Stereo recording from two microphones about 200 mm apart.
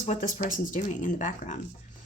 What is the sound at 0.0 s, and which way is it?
Speech, 40° left (ahead or behind).